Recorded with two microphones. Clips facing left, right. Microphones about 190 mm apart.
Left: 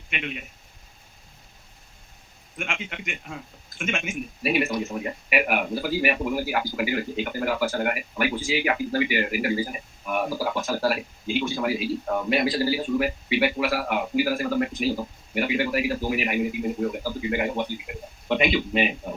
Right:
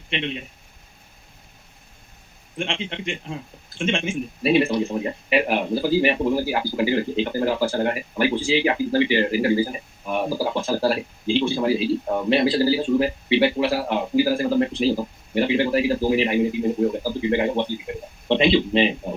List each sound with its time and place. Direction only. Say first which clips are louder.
0.1 s speech: right 5 dB; 30° right (ahead or behind)
2.6 s speech: right 5 dB; 30° right (ahead or behind)